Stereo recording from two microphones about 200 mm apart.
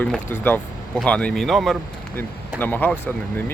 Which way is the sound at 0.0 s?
10° left (ahead or behind).